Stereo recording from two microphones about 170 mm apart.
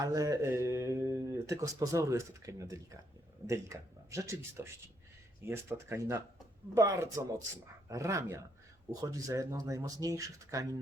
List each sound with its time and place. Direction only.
0.0 s speech: 20° right (ahead or behind)